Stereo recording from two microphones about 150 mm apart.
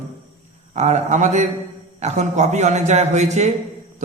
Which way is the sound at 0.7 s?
50° right (ahead or behind).